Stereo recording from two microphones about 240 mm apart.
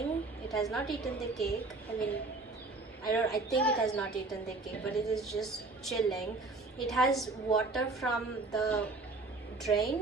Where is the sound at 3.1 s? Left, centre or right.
Centre.